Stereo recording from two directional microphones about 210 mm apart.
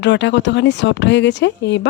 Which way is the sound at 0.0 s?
55° left (ahead or behind).